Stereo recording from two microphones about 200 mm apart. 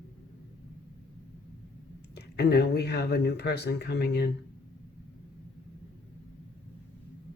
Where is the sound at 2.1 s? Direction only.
55° left (ahead or behind).